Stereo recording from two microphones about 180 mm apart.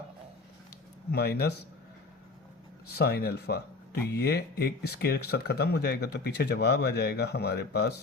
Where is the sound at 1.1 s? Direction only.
60° left (ahead or behind).